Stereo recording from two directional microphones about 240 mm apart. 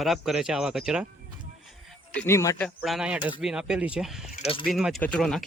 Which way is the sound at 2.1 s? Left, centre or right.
Centre.